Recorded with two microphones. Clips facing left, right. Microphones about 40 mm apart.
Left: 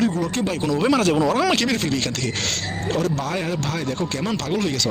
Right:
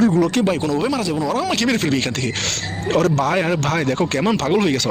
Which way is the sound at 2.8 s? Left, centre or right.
Right.